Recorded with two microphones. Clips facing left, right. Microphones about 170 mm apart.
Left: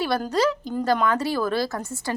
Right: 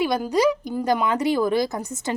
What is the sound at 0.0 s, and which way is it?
Speech, 15° right (ahead or behind).